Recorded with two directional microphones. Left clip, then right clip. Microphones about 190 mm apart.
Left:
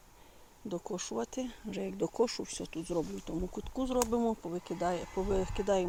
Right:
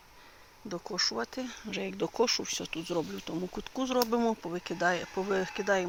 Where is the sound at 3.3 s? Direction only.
25° right (ahead or behind).